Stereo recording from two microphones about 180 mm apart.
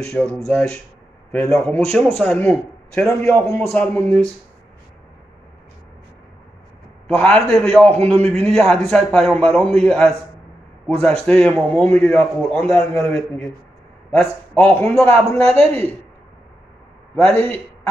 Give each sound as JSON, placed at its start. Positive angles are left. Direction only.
{"t": 0.1, "sound": "a man's voice", "side_deg": 5}
{"t": 7.2, "sound": "a man's voice", "side_deg": 5}
{"t": 17.1, "sound": "a man's voice", "side_deg": 10}